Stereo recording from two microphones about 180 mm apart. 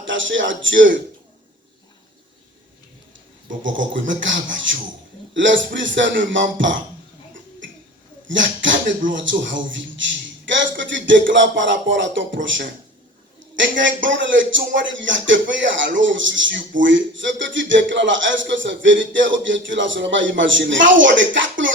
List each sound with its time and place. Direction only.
0.0 s speech: 90° right
3.6 s a man's voice: 90° right
8.3 s a man's voice: 90° right